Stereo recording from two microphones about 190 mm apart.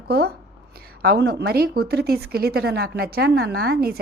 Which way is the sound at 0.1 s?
55° right (ahead or behind).